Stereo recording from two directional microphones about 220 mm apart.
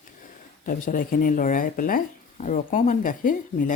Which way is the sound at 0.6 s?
40° left (ahead or behind).